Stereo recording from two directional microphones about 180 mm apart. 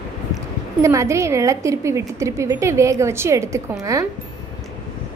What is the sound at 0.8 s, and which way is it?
A woman's voice, 15° right (ahead or behind).